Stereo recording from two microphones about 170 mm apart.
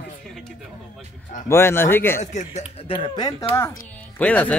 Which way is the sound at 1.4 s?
15° left (ahead or behind).